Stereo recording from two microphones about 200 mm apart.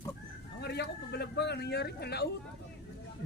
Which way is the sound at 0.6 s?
55° left (ahead or behind).